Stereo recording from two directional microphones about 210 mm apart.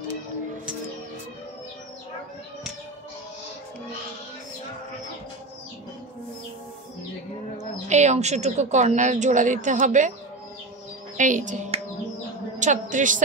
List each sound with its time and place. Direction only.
7.5 s speech: 35° right (ahead or behind)
11.1 s a woman's voice: 35° right (ahead or behind)